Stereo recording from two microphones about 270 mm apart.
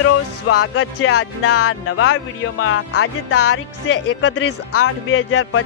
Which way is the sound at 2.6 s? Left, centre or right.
Left.